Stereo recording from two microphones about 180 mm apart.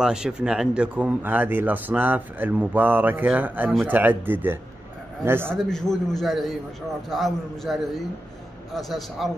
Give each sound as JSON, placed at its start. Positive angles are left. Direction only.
{"t": 0.0, "sound": "speech", "side_deg": -5}
{"t": 5.6, "sound": "a man's voice", "side_deg": 0}